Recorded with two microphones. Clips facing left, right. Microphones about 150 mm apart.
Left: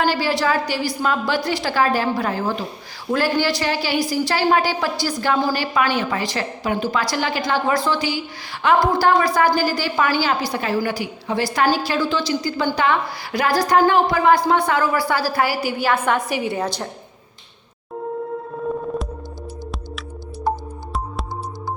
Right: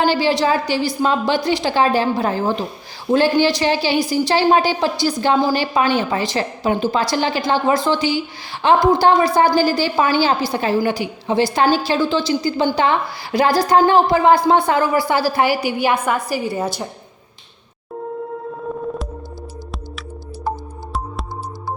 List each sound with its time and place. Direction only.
0.0 s a woman's voice: 25° right (ahead or behind)
16.3 s a woman's voice: centre (ahead or behind)
19.7 s music: centre (ahead or behind)